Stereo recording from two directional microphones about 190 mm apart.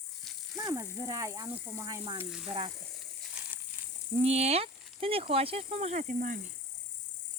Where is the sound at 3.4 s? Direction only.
5° right (ahead or behind).